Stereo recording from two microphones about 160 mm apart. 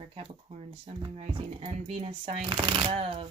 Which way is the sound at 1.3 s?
35° right (ahead or behind).